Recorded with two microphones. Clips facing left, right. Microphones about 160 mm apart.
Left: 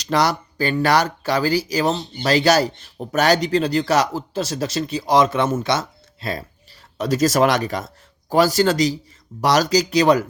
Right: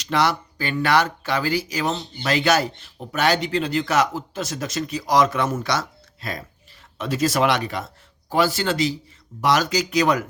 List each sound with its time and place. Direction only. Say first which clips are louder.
0.0 s speech: left 2 dB; 40° left (ahead or behind)
7.0 s speech: left 4 dB; 40° left (ahead or behind)